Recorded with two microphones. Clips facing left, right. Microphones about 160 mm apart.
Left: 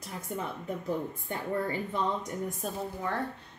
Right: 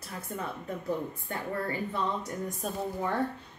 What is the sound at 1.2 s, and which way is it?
Speech, 20° left (ahead or behind).